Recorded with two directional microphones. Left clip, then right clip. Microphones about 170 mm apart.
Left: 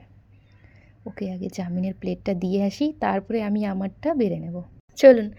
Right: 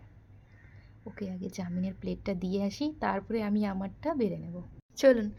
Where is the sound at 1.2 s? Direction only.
25° left (ahead or behind).